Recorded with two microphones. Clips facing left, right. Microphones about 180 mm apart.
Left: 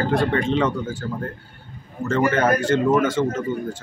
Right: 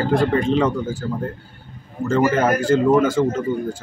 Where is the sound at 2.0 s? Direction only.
5° right (ahead or behind).